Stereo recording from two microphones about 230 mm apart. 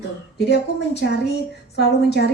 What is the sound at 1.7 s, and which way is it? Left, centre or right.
Speech, left.